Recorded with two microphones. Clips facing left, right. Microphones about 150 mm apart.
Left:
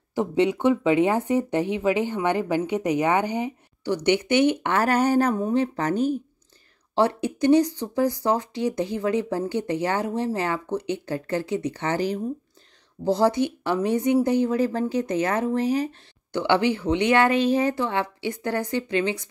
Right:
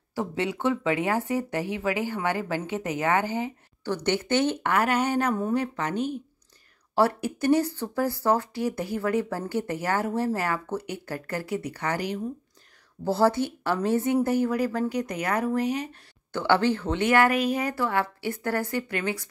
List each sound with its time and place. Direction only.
0.1 s a woman's voice: 20° left (ahead or behind)
4.7 s speech: 40° left (ahead or behind)
5.3 s speech: 25° left (ahead or behind)
7.0 s speech: 20° left (ahead or behind)
13.0 s speech: 15° left (ahead or behind); by 16.0 s 30° left (ahead or behind)
16.3 s speech: 15° left (ahead or behind)